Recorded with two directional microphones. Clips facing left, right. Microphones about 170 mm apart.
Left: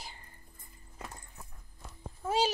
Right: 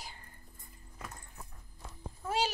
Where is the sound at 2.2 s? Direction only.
20° left (ahead or behind).